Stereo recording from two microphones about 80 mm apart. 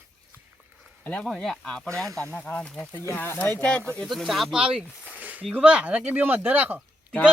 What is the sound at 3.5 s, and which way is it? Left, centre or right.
Speech, centre.